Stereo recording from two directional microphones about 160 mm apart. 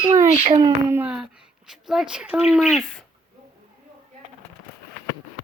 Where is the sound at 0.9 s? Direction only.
10° right (ahead or behind).